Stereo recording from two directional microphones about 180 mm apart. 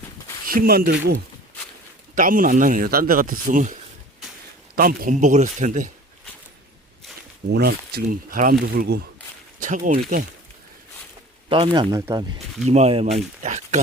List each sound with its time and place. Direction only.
0.4 s speech: 55° right (ahead or behind)
7.5 s speech: 65° right (ahead or behind)
9.6 s speech: 45° right (ahead or behind)
11.4 s speech: 30° right (ahead or behind)
12.6 s speech: 35° right (ahead or behind)